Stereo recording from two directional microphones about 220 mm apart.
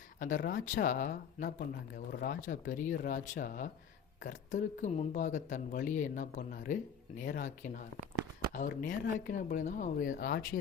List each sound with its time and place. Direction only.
0.2 s speech: 35° left (ahead or behind)